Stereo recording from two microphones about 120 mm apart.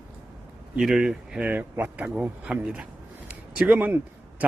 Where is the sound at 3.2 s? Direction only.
15° right (ahead or behind).